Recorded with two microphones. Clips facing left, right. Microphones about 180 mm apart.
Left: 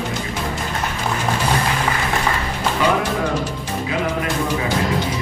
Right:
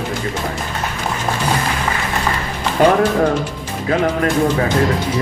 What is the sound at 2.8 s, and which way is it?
Speech, 50° right (ahead or behind).